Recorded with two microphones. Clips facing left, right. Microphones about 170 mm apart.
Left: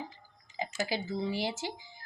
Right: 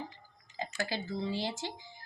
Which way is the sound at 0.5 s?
15° left (ahead or behind).